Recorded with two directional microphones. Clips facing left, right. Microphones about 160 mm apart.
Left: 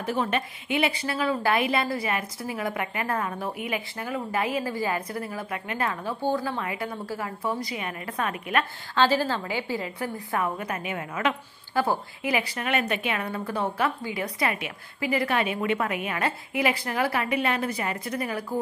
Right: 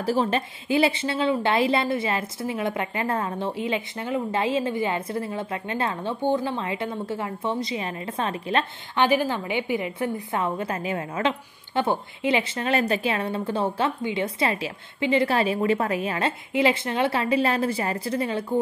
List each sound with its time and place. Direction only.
0.0 s a woman's voice: 30° right (ahead or behind)
9.0 s a woman's voice: 15° right (ahead or behind)